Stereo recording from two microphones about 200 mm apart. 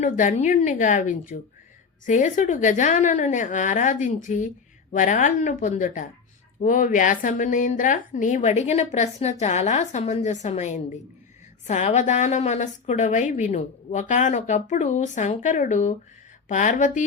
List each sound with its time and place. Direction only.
0.0 s a woman's voice: 40° left (ahead or behind)